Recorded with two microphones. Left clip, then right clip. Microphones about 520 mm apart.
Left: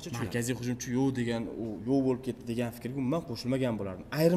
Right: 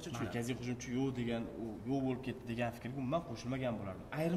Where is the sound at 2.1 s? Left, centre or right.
Centre.